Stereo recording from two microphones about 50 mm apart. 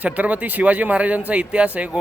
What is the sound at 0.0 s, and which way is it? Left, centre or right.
A man's voice, right.